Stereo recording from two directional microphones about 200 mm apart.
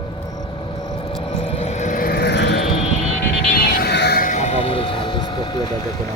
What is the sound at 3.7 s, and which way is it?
Vehicle, 55° left (ahead or behind).